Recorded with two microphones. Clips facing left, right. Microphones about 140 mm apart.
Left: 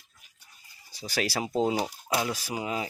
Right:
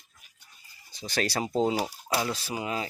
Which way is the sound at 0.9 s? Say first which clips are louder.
Right 1 dB; 10° left (ahead or behind).